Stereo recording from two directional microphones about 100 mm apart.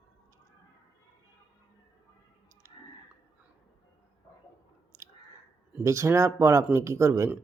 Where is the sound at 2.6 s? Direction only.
30° right (ahead or behind).